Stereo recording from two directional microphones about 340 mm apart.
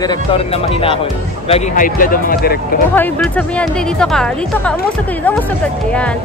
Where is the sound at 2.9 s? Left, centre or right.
Centre.